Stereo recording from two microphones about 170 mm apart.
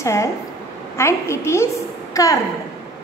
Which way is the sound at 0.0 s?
15° left (ahead or behind).